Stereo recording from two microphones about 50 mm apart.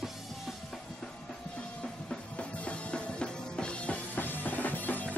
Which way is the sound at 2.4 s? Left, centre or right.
Left.